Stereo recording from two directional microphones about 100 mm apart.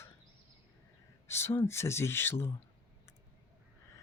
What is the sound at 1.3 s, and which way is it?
Speech, 25° left (ahead or behind).